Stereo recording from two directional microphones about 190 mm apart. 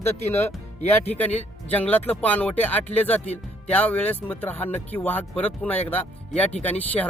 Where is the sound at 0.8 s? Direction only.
35° left (ahead or behind).